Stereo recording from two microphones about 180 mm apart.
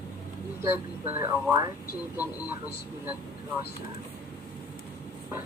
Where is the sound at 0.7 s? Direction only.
10° right (ahead or behind).